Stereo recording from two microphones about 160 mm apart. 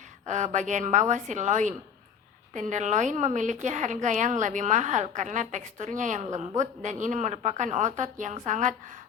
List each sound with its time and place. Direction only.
0.3 s a woman's voice: 50° right (ahead or behind)